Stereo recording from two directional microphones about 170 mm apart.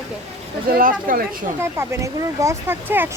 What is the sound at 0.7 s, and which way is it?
Speech, 55° right (ahead or behind).